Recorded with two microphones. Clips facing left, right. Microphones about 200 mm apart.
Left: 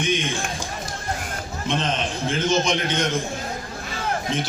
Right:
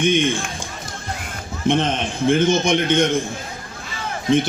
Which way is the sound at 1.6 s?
55° right (ahead or behind).